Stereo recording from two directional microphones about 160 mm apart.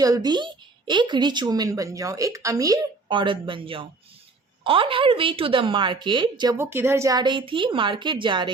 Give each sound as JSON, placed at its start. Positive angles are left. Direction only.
{"t": 0.0, "sound": "a woman's voice", "side_deg": -25}
{"t": 6.6, "sound": "a woman's voice", "side_deg": -15}